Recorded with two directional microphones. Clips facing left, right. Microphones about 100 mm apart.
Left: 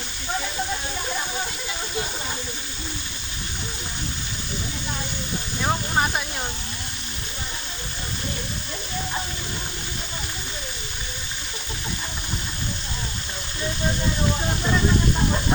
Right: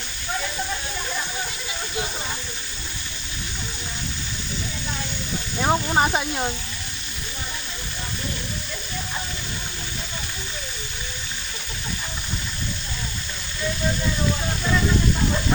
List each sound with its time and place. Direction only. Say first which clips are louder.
5.6 s speech: right 3 dB; 25° right (ahead or behind)